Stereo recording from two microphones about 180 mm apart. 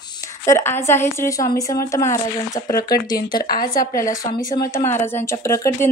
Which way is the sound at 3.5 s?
55° left (ahead or behind).